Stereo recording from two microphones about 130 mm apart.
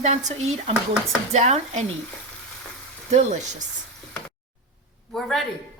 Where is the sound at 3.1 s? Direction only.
65° right (ahead or behind).